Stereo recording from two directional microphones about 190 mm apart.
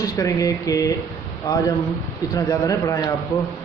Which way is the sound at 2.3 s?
15° left (ahead or behind).